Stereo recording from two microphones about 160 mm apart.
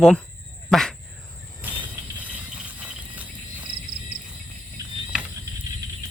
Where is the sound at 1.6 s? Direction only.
10° right (ahead or behind).